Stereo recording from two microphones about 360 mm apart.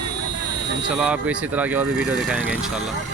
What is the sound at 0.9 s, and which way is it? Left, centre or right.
Speech, centre.